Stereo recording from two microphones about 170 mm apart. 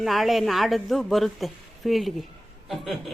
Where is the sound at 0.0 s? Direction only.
Centre (ahead or behind).